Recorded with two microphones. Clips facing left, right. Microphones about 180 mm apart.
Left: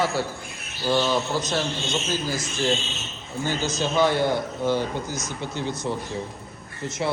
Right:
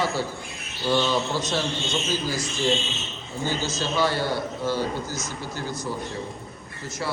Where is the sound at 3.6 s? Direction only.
20° left (ahead or behind).